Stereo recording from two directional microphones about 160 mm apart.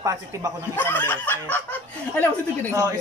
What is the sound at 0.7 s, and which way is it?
Speech, 10° left (ahead or behind).